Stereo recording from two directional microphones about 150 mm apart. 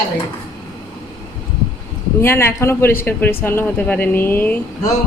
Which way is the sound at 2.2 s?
15° left (ahead or behind).